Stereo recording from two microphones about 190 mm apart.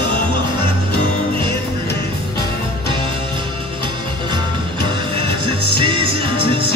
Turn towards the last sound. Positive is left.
turn(degrees=-25)  # may be behind; listen again after turning